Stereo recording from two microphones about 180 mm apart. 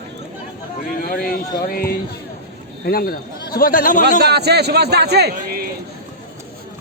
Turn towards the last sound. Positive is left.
turn(degrees=-65)  # may be behind; listen again after turning